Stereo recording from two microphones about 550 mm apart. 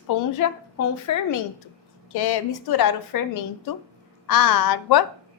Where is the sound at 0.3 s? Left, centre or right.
Left.